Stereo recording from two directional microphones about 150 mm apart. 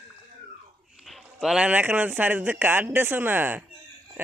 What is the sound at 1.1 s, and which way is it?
Speech, centre (ahead or behind).